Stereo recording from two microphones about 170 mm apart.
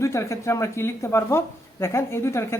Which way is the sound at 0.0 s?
15° left (ahead or behind).